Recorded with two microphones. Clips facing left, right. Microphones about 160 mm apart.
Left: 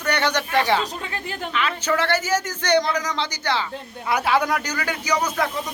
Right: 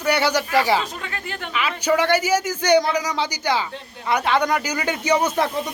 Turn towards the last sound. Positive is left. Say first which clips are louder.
# right 4 dB
turn(degrees=-25)  # may be behind; listen again after turning